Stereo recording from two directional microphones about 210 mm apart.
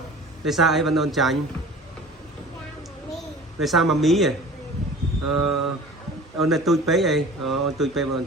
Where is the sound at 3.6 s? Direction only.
Centre (ahead or behind).